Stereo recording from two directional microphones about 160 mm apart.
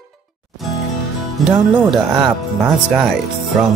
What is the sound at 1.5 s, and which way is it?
Speech, 10° right (ahead or behind).